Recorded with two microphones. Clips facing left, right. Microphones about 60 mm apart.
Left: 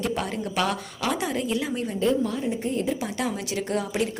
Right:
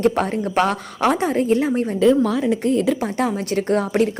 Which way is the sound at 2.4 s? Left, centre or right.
Right.